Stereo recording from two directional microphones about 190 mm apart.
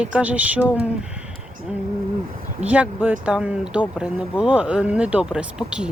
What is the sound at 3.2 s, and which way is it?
Speech, 5° right (ahead or behind).